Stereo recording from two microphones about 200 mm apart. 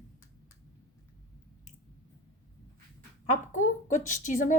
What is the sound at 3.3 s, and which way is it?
Speech, 40° left (ahead or behind).